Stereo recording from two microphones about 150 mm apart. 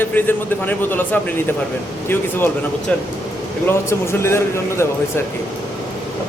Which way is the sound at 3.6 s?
15° left (ahead or behind).